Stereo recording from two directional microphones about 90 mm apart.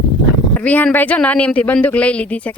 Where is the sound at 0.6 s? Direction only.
20° left (ahead or behind).